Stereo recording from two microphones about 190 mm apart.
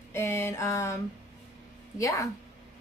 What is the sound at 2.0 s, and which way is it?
Speech, 15° left (ahead or behind).